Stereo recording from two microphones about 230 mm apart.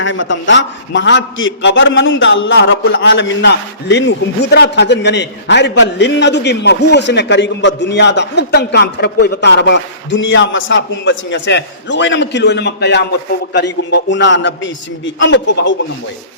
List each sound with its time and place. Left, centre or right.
0.0 s a man's voice: left